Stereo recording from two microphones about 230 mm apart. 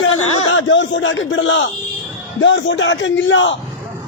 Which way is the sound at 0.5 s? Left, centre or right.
Left.